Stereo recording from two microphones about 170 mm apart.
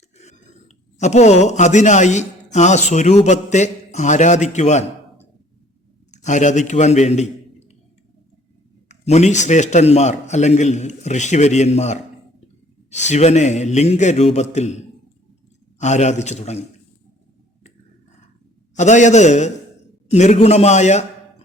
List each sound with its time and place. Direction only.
0.2 s burping: 40° left (ahead or behind)
0.9 s a man's voice: 40° left (ahead or behind)
6.2 s a man's voice: 45° left (ahead or behind)
8.9 s a man's voice: 40° left (ahead or behind)
13.1 s a man's voice: 40° left (ahead or behind)
18.8 s a man's voice: 45° left (ahead or behind)